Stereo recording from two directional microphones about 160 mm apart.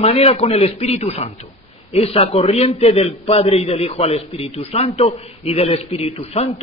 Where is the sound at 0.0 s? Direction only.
40° left (ahead or behind).